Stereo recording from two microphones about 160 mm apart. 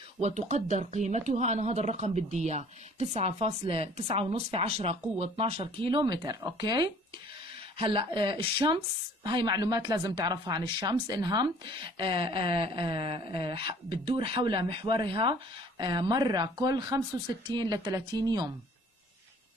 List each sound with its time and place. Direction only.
0.2 s a woman's voice: 45° right (ahead or behind); by 18.5 s 25° right (ahead or behind)